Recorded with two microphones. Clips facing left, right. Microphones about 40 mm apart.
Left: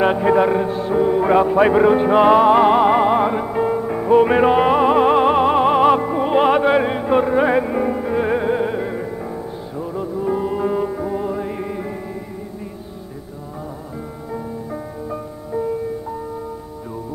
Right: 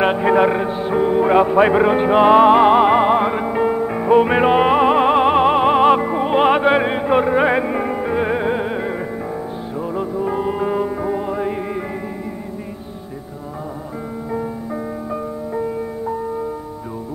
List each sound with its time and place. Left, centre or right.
0.0 s music: centre
14.3 s music: centre